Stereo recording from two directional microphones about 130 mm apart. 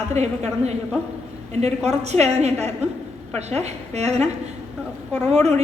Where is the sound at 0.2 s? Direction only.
60° right (ahead or behind).